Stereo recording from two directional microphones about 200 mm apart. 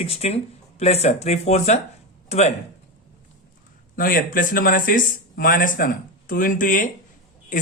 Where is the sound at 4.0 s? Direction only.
45° left (ahead or behind).